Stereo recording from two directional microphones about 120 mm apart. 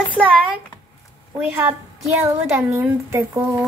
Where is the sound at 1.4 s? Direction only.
15° right (ahead or behind).